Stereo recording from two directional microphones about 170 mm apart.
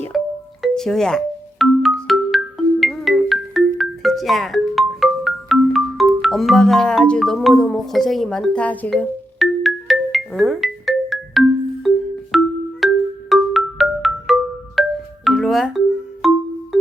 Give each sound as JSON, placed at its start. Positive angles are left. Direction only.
{"t": 0.1, "sound": "music", "side_deg": 0}
{"t": 13.3, "sound": "marimba", "side_deg": 0}
{"t": 14.8, "sound": "music", "side_deg": 0}